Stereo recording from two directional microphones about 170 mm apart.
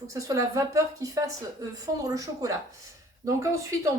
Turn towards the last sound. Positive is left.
turn(degrees=-20)  # may be behind; listen again after turning